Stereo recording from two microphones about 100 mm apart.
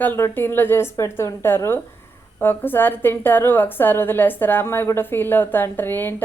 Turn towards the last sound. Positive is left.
turn(degrees=20)  # may be behind; listen again after turning